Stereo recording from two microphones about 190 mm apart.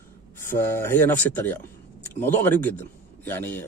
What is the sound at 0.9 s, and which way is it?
A man's voice, 10° left (ahead or behind).